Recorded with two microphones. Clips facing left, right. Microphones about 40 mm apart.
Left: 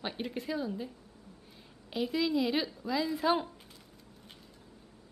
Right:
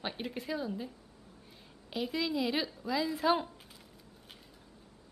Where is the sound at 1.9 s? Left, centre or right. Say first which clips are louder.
Left 3 dB; centre.